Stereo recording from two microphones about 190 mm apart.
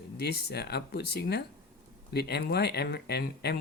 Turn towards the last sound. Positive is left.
turn(degrees=60)  # may be behind; listen again after turning